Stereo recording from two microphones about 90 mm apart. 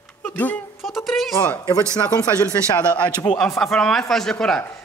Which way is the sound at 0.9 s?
Centre (ahead or behind).